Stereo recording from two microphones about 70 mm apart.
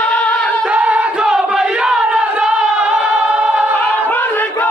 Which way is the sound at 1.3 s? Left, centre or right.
Centre.